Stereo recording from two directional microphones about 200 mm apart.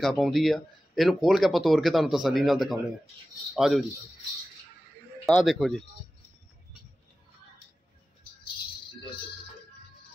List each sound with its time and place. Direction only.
0.0 s speech: centre (ahead or behind)
5.2 s speech: centre (ahead or behind)